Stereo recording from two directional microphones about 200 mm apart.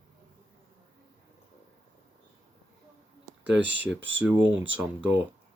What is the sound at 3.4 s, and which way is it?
Speech, 65° right (ahead or behind).